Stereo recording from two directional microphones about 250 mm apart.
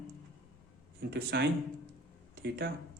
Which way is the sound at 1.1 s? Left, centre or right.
Right.